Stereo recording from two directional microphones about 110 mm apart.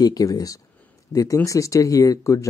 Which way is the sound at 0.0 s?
35° left (ahead or behind).